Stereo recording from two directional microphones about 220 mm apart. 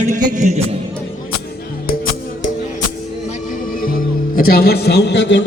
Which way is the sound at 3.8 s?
40° left (ahead or behind).